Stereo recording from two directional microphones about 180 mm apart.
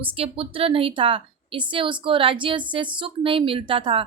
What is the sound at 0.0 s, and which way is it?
A woman's voice, 30° right (ahead or behind).